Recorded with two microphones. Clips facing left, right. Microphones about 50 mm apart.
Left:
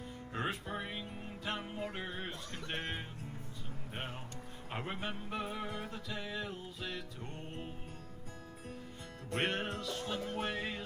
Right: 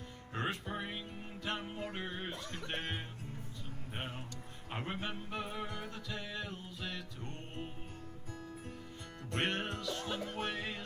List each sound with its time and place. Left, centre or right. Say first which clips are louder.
0.3 s music: even; centre
2.3 s music: right 1 dB; centre
4.7 s music: even; centre
9.3 s music: left 1 dB; centre